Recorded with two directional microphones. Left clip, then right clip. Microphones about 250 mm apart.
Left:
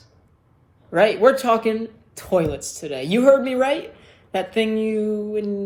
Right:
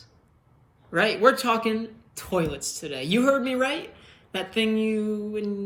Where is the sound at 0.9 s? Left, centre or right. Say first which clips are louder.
Left 5 dB; left.